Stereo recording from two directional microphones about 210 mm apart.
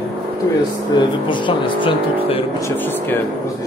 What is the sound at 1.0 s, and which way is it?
Speech, 20° left (ahead or behind).